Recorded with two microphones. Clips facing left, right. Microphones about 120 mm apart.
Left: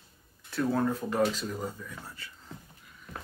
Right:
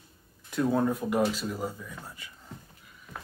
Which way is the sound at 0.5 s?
15° right (ahead or behind).